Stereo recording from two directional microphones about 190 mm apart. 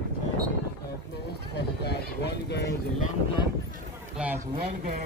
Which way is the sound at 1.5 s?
60° left (ahead or behind).